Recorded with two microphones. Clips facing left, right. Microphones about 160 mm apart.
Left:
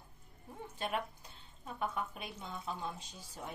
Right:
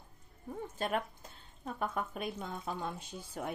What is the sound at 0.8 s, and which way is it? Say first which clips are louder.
Speech: right 2 dB; 45° right (ahead or behind).